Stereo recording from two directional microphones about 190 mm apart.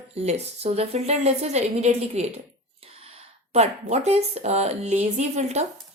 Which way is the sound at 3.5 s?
35° right (ahead or behind).